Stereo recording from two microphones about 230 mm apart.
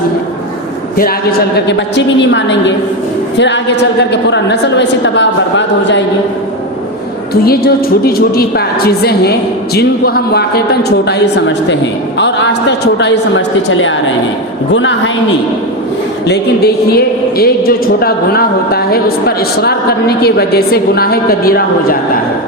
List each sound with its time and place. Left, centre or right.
0.9 s a woman's voice: left
7.4 s a woman's voice: left
10.3 s a woman's voice: left
12.2 s a woman's voice: left
16.2 s a woman's voice: left